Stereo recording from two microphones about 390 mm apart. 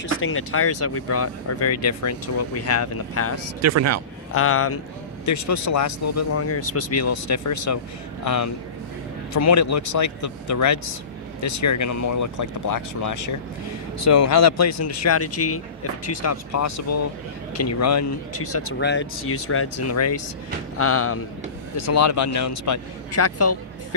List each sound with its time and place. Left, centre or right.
0.0 s speech: left
3.6 s speech: right
4.3 s speech: left
5.2 s speech: left